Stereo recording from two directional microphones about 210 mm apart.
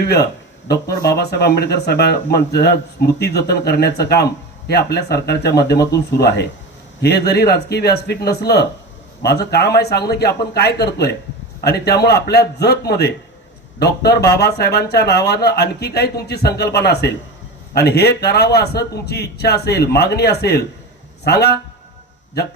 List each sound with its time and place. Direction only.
0.7 s speech: 50° left (ahead or behind)